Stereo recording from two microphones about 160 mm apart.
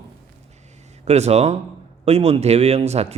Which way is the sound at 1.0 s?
40° right (ahead or behind).